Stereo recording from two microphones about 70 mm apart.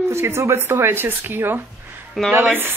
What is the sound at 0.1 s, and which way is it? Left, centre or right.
Speech, right.